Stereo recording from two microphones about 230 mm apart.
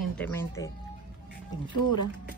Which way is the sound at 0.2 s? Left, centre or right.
Centre.